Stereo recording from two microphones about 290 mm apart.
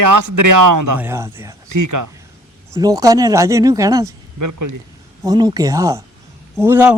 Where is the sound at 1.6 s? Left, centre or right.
Right.